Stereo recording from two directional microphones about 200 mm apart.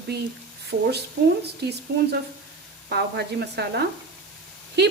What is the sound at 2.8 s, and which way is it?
Speech, 55° right (ahead or behind).